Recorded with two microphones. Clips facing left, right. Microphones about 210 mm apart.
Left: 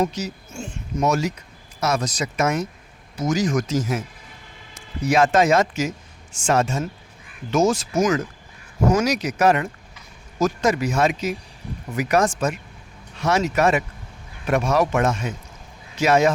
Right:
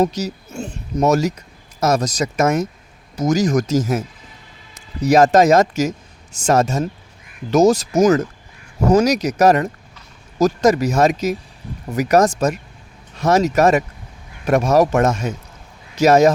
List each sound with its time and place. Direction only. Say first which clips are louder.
0.0 s speech: right 5 dB; 40° right (ahead or behind)